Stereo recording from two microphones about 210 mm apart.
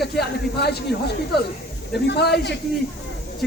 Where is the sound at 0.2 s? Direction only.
50° left (ahead or behind).